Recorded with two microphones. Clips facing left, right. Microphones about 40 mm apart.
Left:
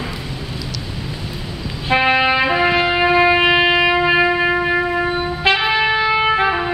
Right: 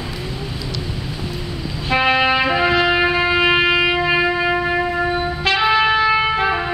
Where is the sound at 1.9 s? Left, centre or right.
Centre.